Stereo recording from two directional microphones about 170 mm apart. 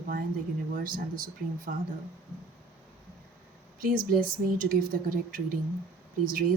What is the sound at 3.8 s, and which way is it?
Speech, 55° right (ahead or behind).